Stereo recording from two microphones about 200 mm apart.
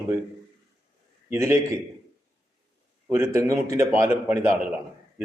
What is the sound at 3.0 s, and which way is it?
A man's voice, 10° right (ahead or behind).